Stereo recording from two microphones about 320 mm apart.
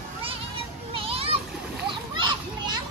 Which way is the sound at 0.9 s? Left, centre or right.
Centre.